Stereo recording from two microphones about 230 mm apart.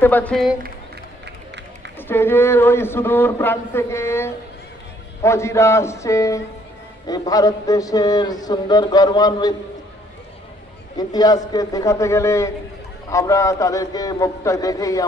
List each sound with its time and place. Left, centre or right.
0.0 s speech: centre
2.0 s a man's voice: centre
11.0 s a man's voice: centre